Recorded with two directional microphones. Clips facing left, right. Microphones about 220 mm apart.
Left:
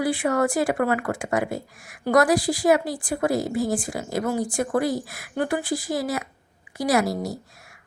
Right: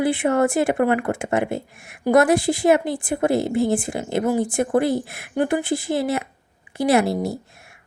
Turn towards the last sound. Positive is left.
turn(degrees=-25)  # may be behind; listen again after turning